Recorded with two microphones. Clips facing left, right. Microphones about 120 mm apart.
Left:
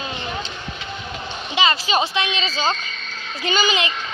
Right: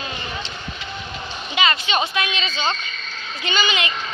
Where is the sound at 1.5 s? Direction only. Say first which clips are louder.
Left 2 dB; 30° left (ahead or behind).